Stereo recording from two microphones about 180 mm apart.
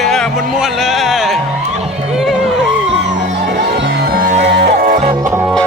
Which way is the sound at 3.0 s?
80° right.